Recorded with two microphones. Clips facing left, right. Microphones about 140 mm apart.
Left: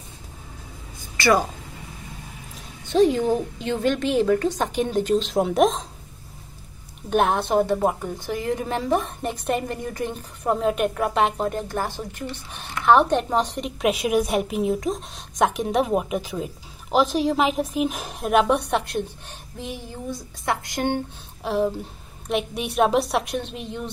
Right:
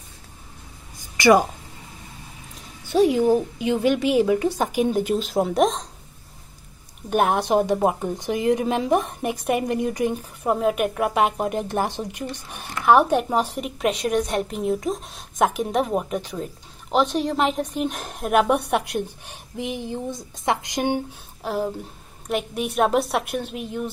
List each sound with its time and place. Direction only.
1.1 s speech: 15° right (ahead or behind)
2.5 s a woman's voice: 10° right (ahead or behind)
7.1 s a woman's voice: 10° right (ahead or behind)
21.4 s a woman's voice: centre (ahead or behind)